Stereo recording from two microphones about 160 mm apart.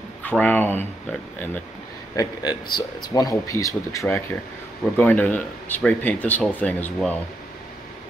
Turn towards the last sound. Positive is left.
turn(degrees=10)  # may be behind; listen again after turning